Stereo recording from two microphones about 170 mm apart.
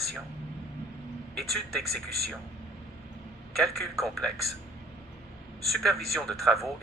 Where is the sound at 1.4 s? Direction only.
Centre (ahead or behind).